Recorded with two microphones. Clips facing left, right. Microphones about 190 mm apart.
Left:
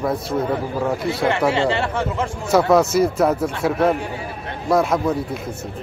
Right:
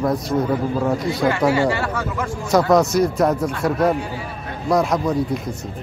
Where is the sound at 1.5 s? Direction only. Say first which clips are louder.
Right 1 dB; 25° left (ahead or behind).